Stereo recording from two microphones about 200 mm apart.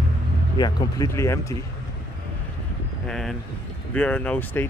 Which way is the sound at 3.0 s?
Centre (ahead or behind).